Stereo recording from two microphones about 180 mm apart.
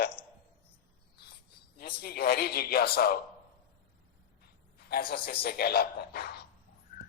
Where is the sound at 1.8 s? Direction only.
60° left (ahead or behind).